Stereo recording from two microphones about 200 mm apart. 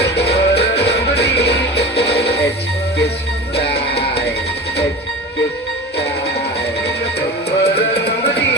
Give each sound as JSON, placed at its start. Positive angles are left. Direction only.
{"t": 0.0, "sound": "music", "side_deg": 55}
{"t": 3.5, "sound": "music", "side_deg": 55}
{"t": 7.6, "sound": "music", "side_deg": 55}